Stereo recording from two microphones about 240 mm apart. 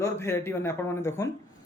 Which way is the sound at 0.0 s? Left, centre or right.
Centre.